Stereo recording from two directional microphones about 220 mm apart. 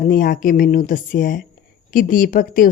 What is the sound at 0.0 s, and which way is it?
Speech, 40° left (ahead or behind).